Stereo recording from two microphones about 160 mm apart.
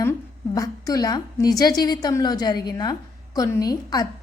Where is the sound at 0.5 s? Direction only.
20° left (ahead or behind).